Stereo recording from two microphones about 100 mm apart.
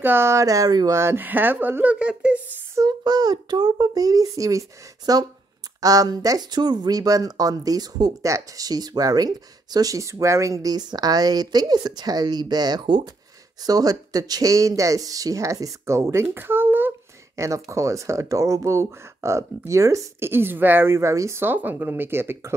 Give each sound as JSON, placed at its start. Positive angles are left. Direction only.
{"t": 0.0, "sound": "speech", "side_deg": -25}
{"t": 0.9, "sound": "speech", "side_deg": -25}
{"t": 3.0, "sound": "speech", "side_deg": -40}
{"t": 17.4, "sound": "speech", "side_deg": -30}